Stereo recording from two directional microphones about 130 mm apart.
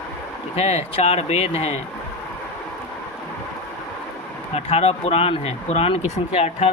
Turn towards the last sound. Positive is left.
turn(degrees=55)  # may be behind; listen again after turning